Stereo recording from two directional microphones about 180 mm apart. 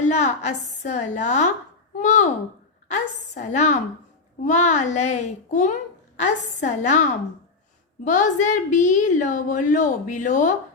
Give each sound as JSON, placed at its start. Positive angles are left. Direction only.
{"t": 0.0, "sound": "a woman's voice", "side_deg": 40}